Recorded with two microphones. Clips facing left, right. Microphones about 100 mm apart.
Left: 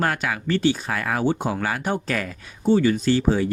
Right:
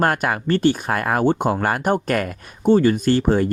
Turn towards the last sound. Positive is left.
turn(degrees=-50)  # may be behind; listen again after turning